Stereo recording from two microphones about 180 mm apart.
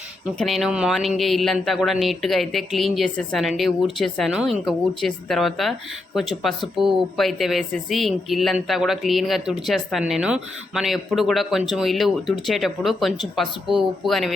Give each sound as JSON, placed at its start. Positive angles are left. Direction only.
{"t": 0.3, "sound": "speech", "side_deg": 0}